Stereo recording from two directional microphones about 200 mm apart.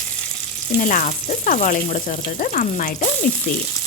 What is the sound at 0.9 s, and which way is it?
Speech, 40° left (ahead or behind).